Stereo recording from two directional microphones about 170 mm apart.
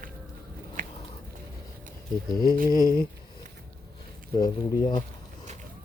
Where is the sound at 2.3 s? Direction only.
20° left (ahead or behind).